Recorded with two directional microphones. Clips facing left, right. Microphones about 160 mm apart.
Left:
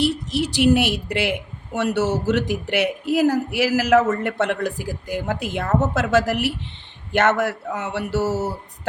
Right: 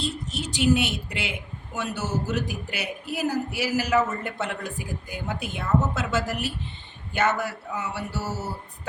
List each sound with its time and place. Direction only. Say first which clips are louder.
0.0 s a woman's voice: left 9 dB; 75° left (ahead or behind)